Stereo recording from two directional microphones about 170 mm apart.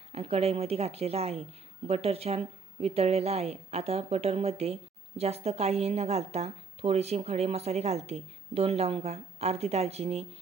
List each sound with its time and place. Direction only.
0.1 s a woman's voice: 35° right (ahead or behind)